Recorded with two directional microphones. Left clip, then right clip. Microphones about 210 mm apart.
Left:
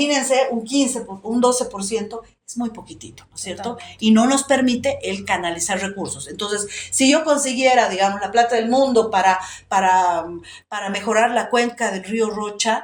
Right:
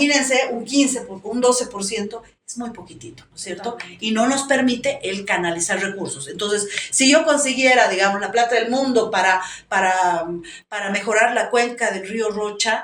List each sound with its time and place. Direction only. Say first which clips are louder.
0.0 s speech: even; 30° left (ahead or behind)
1.9 s speech: left 2 dB; 35° left (ahead or behind)